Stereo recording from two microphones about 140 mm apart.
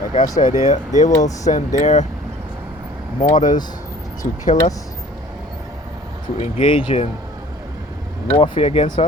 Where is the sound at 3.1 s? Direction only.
65° left (ahead or behind).